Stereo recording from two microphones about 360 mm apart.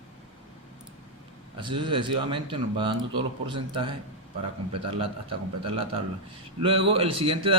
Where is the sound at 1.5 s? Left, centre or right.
Centre.